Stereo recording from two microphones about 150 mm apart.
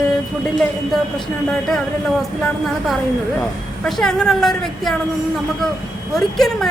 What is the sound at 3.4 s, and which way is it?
A woman's voice, 5° left (ahead or behind).